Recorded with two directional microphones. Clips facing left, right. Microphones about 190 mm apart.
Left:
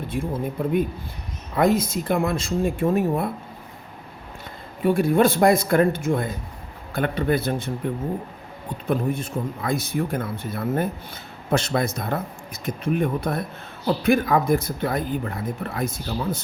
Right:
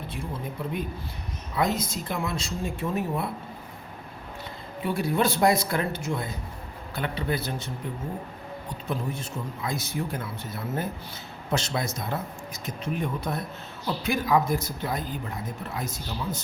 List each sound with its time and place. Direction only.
1.5 s speech: 55° left (ahead or behind)
4.8 s speech: 50° left (ahead or behind)
8.9 s speech: 55° left (ahead or behind)